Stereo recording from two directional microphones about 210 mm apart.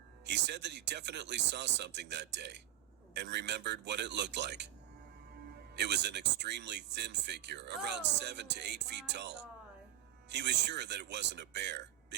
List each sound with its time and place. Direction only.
0.3 s speech: 55° right (ahead or behind)
5.7 s speech: 55° right (ahead or behind)